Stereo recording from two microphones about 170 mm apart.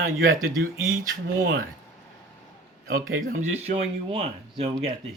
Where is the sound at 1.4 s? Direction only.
90° right.